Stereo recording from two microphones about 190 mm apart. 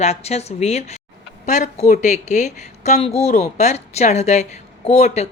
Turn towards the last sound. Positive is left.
turn(degrees=35)  # may be behind; listen again after turning